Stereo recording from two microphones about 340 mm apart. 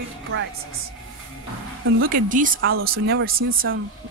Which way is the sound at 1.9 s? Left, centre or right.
Right.